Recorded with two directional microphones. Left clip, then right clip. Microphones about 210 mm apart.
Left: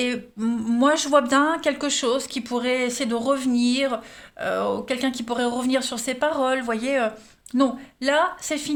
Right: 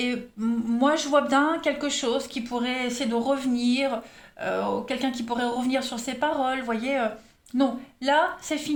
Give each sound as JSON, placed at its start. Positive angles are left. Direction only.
{"t": 0.0, "sound": "speech", "side_deg": 45}